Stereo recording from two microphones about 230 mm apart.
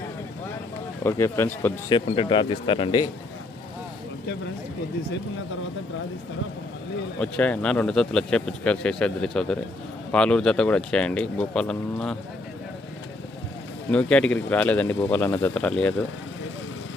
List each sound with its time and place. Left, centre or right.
1.0 s a man's voice: centre
1.9 s speech: left
7.2 s speech: centre
13.9 s a man's voice: centre